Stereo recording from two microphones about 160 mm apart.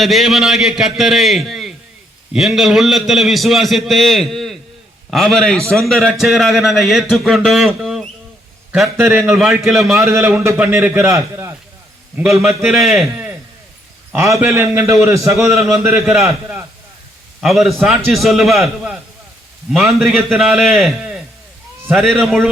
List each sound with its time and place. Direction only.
0.0 s a man's voice: centre (ahead or behind)
10.0 s a man's voice: 15° right (ahead or behind)
12.1 s a man's voice: centre (ahead or behind)
14.1 s a man's voice: 20° right (ahead or behind)
15.4 s a man's voice: centre (ahead or behind)